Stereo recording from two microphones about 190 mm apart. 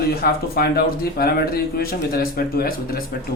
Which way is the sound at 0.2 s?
55° left (ahead or behind).